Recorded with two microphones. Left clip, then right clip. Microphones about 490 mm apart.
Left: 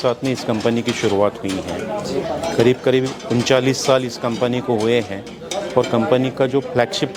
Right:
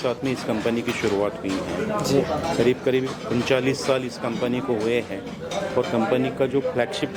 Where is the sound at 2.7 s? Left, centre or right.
Left.